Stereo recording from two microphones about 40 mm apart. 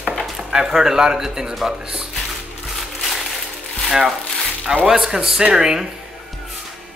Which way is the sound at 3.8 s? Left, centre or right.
Centre.